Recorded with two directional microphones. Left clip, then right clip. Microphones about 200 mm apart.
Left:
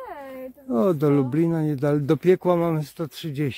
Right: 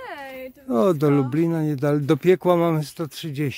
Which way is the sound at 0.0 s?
30° right (ahead or behind).